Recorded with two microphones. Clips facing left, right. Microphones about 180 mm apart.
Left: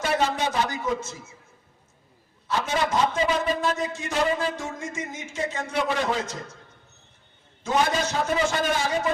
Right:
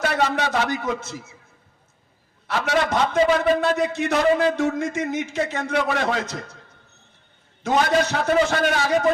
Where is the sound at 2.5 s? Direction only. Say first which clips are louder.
Right 3 dB; 70° right (ahead or behind).